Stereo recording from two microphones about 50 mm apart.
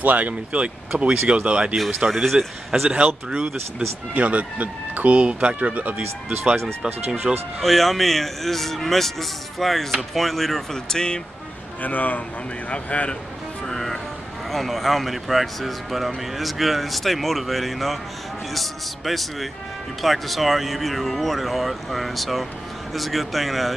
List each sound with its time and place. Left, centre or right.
0.0 s speech: right
2.0 s speech: centre
4.1 s speech: right
7.3 s speech: centre
7.6 s speech: centre
11.8 s speech: left
13.7 s speech: centre